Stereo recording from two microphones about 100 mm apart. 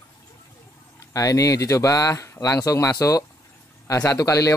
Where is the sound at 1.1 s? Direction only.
35° left (ahead or behind).